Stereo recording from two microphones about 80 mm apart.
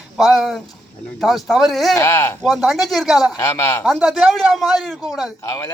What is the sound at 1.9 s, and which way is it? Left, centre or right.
Speech, left.